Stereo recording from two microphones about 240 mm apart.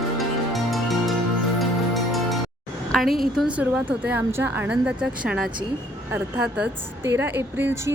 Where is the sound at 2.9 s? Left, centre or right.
Centre.